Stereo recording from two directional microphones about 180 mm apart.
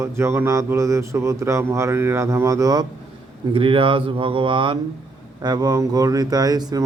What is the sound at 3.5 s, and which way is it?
Speech, 30° right (ahead or behind).